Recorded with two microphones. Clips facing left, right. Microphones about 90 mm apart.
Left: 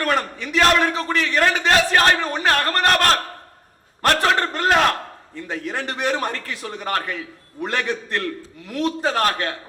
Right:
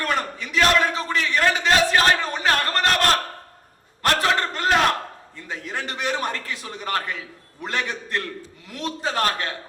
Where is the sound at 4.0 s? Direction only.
35° left (ahead or behind).